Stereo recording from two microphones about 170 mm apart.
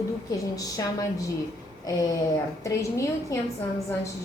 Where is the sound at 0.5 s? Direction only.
20° left (ahead or behind).